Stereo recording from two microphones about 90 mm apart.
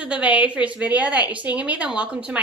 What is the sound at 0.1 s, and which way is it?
A woman's voice, 15° right (ahead or behind).